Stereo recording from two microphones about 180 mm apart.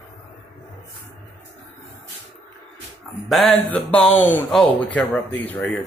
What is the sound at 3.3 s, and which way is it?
A man's voice, centre (ahead or behind).